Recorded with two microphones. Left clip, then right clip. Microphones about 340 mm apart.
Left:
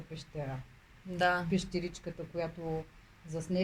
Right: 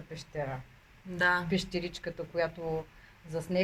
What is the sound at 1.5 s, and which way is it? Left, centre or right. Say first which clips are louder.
Speech: right 2 dB; right.